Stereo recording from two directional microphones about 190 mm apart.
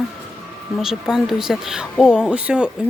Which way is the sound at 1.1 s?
Centre (ahead or behind).